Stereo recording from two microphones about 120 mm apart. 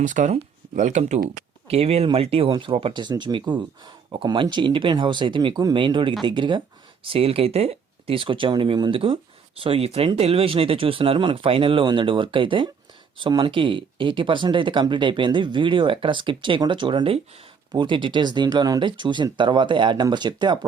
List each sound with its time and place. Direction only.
0.0 s speech: 90° right
1.6 s speech: 55° right (ahead or behind); by 6.6 s 40° right (ahead or behind)
7.0 s speech: 50° right (ahead or behind)